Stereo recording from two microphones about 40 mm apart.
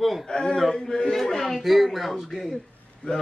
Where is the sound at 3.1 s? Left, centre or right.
Left.